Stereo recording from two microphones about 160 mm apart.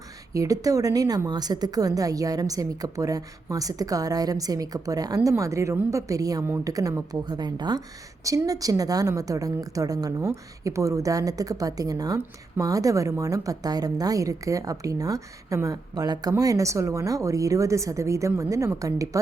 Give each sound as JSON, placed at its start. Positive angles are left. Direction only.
{"t": 0.3, "sound": "a woman's voice", "side_deg": -20}